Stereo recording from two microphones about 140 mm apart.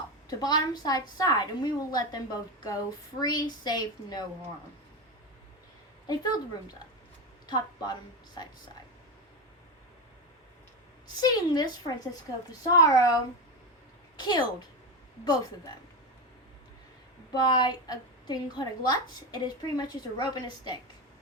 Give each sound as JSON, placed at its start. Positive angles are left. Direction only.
{"t": 0.3, "sound": "a woman's voice", "side_deg": 25}
{"t": 6.1, "sound": "a woman's voice", "side_deg": 30}
{"t": 11.1, "sound": "a woman's voice", "side_deg": 30}
{"t": 14.2, "sound": "a woman's voice", "side_deg": 30}
{"t": 17.3, "sound": "a woman's voice", "side_deg": 30}